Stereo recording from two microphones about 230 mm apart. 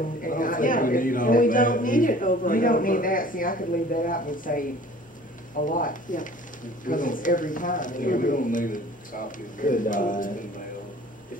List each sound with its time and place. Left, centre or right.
0.2 s speech: left
5.7 s speech: left